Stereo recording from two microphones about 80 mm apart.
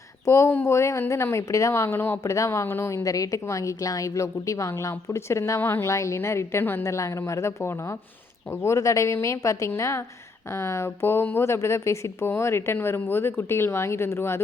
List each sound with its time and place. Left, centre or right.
0.3 s a woman's voice: left
1.9 s speech: left
2.2 s a woman's voice: left
2.6 s speech: left
2.9 s a woman's voice: left
5.8 s a woman's voice: left
6.8 s a woman's voice: left